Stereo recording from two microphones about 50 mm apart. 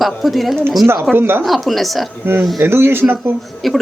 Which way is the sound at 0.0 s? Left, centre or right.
Centre.